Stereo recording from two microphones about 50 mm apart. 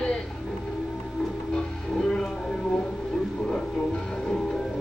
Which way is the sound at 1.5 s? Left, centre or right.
Centre.